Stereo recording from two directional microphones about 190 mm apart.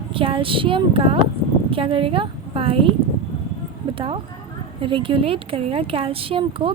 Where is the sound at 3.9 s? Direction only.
30° right (ahead or behind).